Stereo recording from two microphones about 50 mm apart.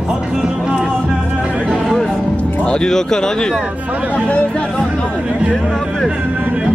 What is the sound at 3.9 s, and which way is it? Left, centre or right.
Speech, right.